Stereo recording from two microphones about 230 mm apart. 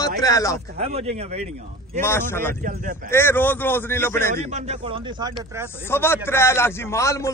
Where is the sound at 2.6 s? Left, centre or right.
Right.